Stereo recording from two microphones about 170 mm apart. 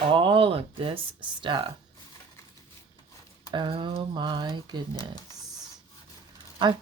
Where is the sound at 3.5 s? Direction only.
30° right (ahead or behind).